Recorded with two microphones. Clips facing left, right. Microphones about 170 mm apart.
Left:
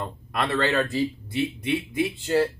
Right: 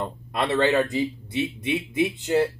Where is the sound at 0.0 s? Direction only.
25° right (ahead or behind).